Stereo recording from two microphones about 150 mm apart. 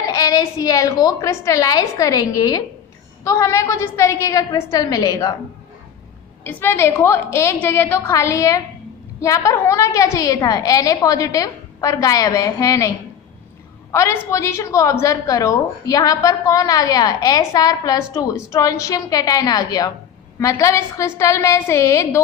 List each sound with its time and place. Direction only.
0.1 s a woman's voice: 25° left (ahead or behind)
6.5 s a woman's voice: 15° left (ahead or behind)
13.9 s a woman's voice: 20° left (ahead or behind)